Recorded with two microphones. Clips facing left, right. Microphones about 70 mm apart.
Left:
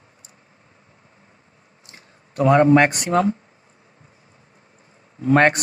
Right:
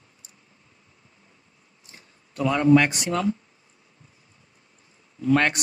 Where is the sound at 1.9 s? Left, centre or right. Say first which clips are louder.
Left 5 dB; left.